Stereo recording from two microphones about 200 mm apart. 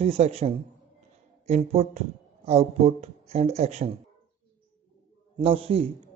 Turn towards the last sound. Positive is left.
turn(degrees=-30)  # may be behind; listen again after turning